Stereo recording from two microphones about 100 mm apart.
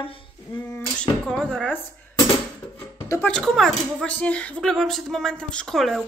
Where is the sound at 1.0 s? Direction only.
10° left (ahead or behind).